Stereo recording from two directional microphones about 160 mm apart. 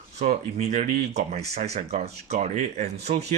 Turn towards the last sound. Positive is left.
turn(degrees=-45)  # may be behind; listen again after turning